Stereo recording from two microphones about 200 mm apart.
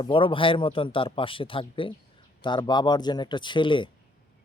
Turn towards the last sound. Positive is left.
turn(degrees=25)  # may be behind; listen again after turning